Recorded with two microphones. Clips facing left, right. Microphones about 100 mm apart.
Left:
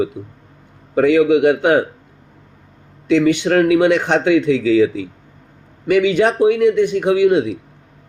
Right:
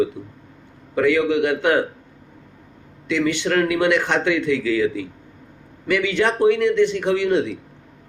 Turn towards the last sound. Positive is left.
turn(degrees=15)  # may be behind; listen again after turning